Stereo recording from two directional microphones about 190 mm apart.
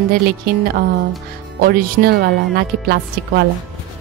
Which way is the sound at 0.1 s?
55° right (ahead or behind).